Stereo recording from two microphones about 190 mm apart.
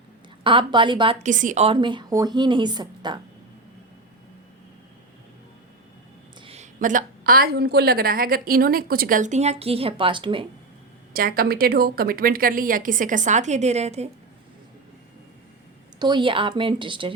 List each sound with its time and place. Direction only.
0.4 s a woman's voice: 25° right (ahead or behind)
1.2 s a woman's voice: 40° right (ahead or behind); by 3.2 s 25° right (ahead or behind)
6.4 s a woman's voice: 35° right (ahead or behind)
11.1 s a woman's voice: 50° right (ahead or behind); by 14.1 s 35° right (ahead or behind)
16.0 s a woman's voice: 25° right (ahead or behind)